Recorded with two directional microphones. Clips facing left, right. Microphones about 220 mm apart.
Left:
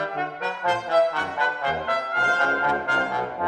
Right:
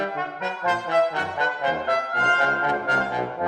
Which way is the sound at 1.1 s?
20° right (ahead or behind).